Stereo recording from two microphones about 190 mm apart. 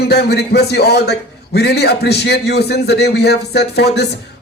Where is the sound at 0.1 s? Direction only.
60° left (ahead or behind).